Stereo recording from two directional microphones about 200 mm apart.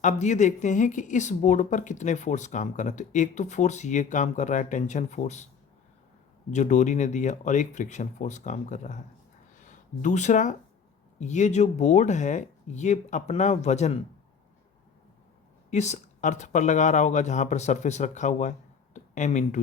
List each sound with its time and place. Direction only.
0.0 s speech: 35° left (ahead or behind)
6.5 s speech: 35° left (ahead or behind)
15.7 s speech: 35° left (ahead or behind)